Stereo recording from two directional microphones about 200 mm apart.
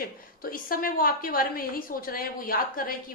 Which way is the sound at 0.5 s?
45° left (ahead or behind).